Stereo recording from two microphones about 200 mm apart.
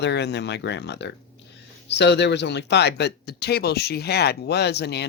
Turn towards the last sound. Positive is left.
turn(degrees=55)  # may be behind; listen again after turning